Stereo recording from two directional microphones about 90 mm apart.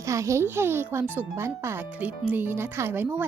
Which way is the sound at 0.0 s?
35° right (ahead or behind).